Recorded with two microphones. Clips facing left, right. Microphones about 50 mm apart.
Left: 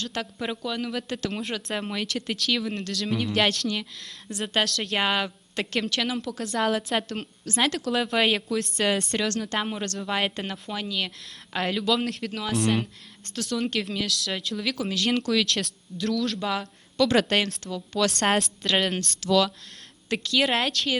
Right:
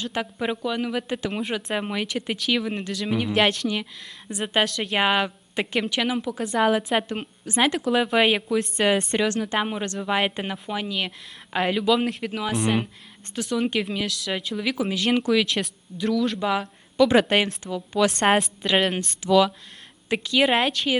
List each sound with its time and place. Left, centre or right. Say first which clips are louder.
0.0 s a woman's voice: right 4 dB; centre